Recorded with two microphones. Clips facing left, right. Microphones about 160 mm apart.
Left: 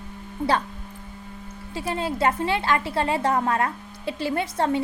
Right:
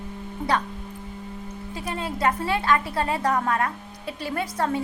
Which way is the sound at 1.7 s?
30° left (ahead or behind).